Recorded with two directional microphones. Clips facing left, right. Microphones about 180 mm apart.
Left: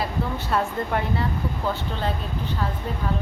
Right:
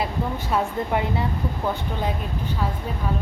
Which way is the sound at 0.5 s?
15° right (ahead or behind).